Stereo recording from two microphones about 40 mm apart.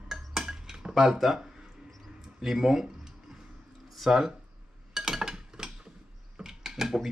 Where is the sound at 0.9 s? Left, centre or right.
Centre.